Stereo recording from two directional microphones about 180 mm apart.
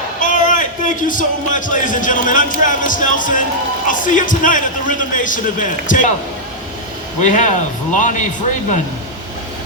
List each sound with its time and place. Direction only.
0.2 s a man's voice: 45° left (ahead or behind)
7.2 s a man's voice: 45° left (ahead or behind)